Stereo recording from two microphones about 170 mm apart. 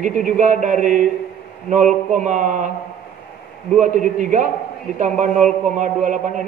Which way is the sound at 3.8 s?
50° right (ahead or behind).